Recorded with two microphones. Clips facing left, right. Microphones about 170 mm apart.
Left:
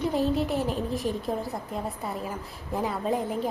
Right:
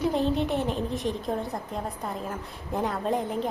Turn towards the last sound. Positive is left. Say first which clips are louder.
# even
turn(degrees=0)  # may be behind; listen again after turning